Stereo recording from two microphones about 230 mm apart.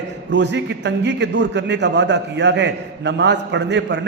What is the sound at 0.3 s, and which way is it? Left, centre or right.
A man's voice, right.